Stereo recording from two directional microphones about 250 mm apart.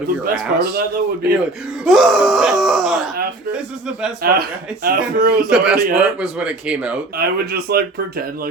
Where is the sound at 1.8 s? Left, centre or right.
Centre.